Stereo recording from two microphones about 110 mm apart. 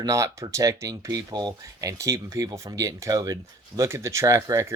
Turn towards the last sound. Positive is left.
turn(degrees=-30)  # may be behind; listen again after turning